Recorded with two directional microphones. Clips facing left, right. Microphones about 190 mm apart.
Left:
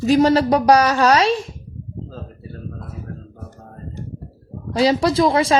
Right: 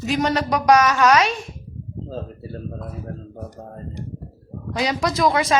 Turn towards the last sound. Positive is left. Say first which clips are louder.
# left 3 dB
turn(degrees=30)  # may be behind; listen again after turning